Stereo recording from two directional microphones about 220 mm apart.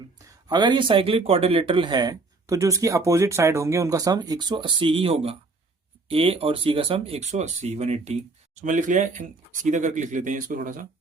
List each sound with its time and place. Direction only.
0.4 s speech: 20° right (ahead or behind); by 10.8 s 40° right (ahead or behind)